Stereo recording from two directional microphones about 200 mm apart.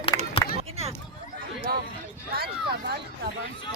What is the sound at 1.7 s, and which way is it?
Speech, 50° right (ahead or behind).